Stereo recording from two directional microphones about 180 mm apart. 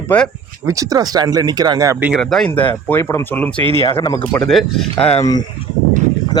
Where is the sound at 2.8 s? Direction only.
15° left (ahead or behind).